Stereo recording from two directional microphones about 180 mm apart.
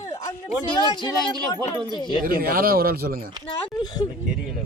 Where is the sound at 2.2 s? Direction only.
55° right (ahead or behind).